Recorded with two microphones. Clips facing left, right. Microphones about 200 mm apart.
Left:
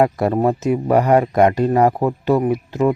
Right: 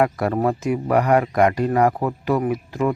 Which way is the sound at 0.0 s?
25° left (ahead or behind).